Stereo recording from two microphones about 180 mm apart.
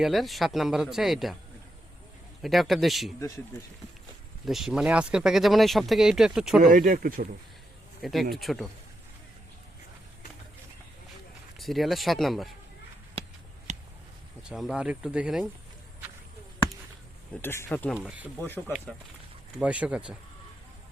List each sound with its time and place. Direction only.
0.0 s speech: centre (ahead or behind)
2.4 s speech: centre (ahead or behind)
4.4 s speech: centre (ahead or behind)
6.6 s speech: 50° right (ahead or behind)
8.0 s speech: centre (ahead or behind)
11.6 s speech: centre (ahead or behind)
13.7 s a sound: 40° right (ahead or behind)
14.5 s speech: centre (ahead or behind)
17.4 s speech: 10° left (ahead or behind)
17.9 s speech: 5° right (ahead or behind)
18.3 s speech: 10° left (ahead or behind)
19.5 s speech: 5° right (ahead or behind)